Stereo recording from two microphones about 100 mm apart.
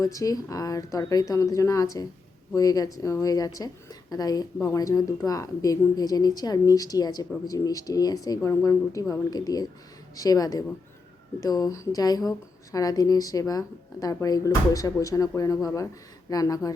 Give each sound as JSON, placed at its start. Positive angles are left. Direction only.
{"t": 0.0, "sound": "speech", "side_deg": 35}